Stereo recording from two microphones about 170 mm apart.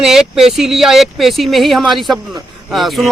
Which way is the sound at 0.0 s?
5° right (ahead or behind).